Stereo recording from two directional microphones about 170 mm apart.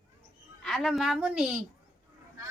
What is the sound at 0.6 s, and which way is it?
Speech, centre (ahead or behind).